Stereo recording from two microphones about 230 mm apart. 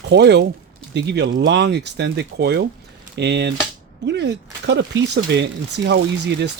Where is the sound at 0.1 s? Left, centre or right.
Right.